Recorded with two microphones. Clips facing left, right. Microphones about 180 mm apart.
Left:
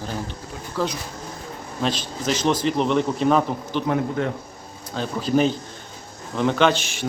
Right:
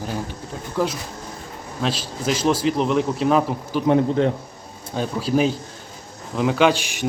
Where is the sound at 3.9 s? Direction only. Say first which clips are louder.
Right 7 dB; 25° right (ahead or behind).